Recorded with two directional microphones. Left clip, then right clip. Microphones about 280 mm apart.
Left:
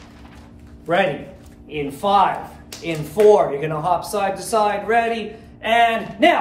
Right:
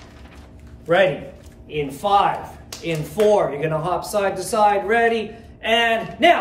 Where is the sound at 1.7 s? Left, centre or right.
Centre.